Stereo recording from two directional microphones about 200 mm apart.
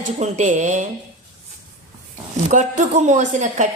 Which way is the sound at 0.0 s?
35° right (ahead or behind).